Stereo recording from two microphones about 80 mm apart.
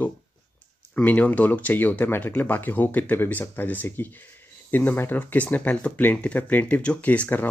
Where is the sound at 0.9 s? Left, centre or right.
Centre.